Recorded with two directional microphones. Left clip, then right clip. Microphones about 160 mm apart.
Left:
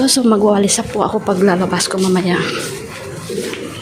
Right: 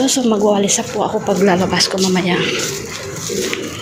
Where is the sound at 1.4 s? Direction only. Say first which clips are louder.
Right 2 dB; 20° left (ahead or behind).